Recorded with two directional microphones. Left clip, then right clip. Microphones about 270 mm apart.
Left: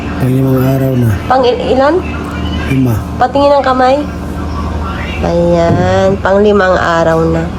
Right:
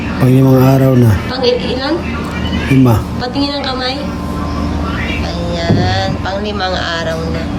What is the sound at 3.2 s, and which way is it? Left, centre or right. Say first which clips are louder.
Speech: left 13 dB; centre.